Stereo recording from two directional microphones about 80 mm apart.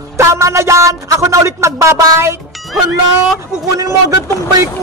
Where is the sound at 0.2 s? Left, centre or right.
Right.